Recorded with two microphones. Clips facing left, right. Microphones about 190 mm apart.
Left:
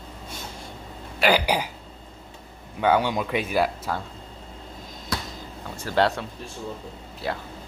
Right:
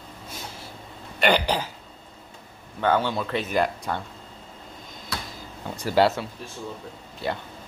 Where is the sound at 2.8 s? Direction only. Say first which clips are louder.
Left 2 dB; 10° left (ahead or behind).